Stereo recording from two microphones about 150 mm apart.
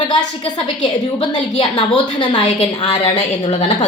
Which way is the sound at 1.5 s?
30° left (ahead or behind).